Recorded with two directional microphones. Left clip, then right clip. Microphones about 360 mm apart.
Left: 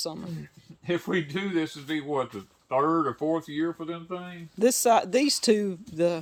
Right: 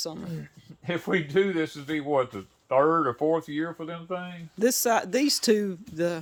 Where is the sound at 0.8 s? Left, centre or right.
Centre.